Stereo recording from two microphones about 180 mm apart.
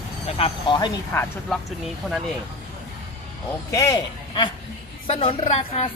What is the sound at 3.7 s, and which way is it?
A man's voice, 20° left (ahead or behind).